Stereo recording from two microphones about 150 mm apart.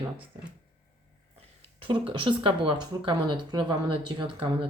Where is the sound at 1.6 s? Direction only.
35° right (ahead or behind).